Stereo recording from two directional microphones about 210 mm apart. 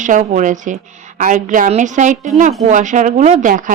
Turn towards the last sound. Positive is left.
turn(degrees=-40)  # may be behind; listen again after turning